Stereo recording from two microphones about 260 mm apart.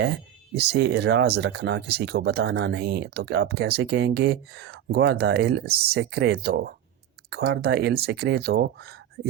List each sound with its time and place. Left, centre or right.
0.0 s speech: right